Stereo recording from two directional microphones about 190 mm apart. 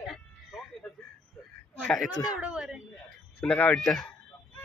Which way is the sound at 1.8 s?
Centre (ahead or behind).